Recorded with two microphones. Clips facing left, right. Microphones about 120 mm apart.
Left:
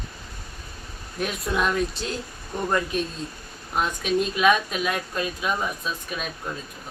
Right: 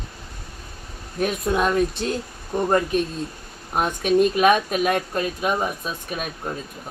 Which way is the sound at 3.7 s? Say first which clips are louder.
Right 5 dB; 50° right (ahead or behind).